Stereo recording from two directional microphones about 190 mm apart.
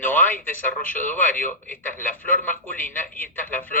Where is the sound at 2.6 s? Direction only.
10° left (ahead or behind).